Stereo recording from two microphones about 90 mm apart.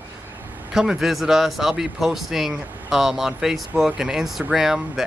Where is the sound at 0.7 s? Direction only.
5° right (ahead or behind).